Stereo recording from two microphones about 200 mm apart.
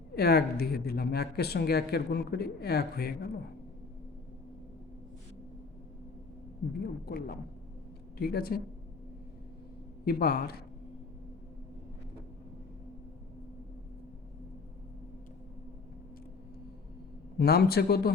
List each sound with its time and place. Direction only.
0.2 s speech: 50° left (ahead or behind)
7.0 s speech: 50° left (ahead or behind)
10.1 s speech: 50° left (ahead or behind)
17.3 s speech: 50° left (ahead or behind)